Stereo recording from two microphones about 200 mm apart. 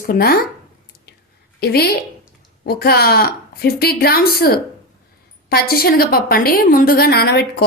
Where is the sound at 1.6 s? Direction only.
50° left (ahead or behind).